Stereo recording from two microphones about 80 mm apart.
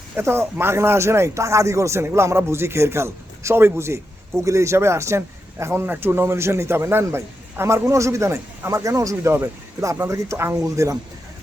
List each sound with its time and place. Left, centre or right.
0.2 s speech: right
10.6 s speech: right